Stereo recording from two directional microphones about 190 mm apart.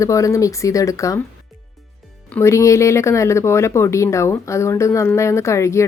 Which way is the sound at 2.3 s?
15° left (ahead or behind).